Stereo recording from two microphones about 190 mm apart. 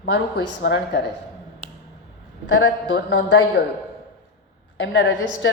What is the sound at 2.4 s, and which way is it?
A man's voice, 70° left (ahead or behind).